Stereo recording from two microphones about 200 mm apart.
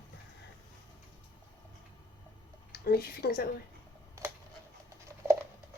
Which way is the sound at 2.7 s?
50° left (ahead or behind).